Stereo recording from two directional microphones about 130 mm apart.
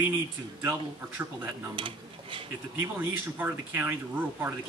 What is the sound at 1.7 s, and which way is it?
Speech, 40° right (ahead or behind).